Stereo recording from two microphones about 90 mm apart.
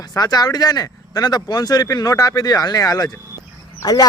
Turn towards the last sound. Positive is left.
turn(degrees=45)  # may be behind; listen again after turning